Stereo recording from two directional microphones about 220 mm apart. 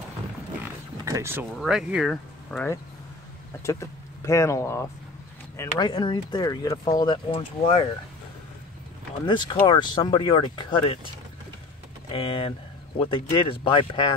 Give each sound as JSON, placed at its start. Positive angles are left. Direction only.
{"t": 1.0, "sound": "speech", "side_deg": -15}
{"t": 1.6, "sound": "speech", "side_deg": 0}
{"t": 3.6, "sound": "speech", "side_deg": 15}
{"t": 9.2, "sound": "speech", "side_deg": 20}
{"t": 12.1, "sound": "speech", "side_deg": 25}